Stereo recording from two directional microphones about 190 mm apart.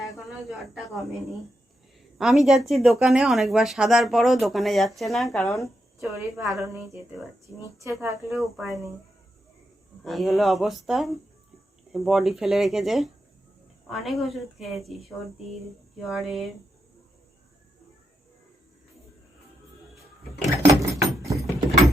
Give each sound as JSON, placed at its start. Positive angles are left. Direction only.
{"t": 0.7, "sound": "speech", "side_deg": 0}
{"t": 6.3, "sound": "speech", "side_deg": -15}
{"t": 7.8, "sound": "speech", "side_deg": -15}
{"t": 8.3, "sound": "speech", "side_deg": 0}
{"t": 10.0, "sound": "speech", "side_deg": 0}
{"t": 16.0, "sound": "speech", "side_deg": 0}
{"t": 20.6, "sound": "a sound", "side_deg": -15}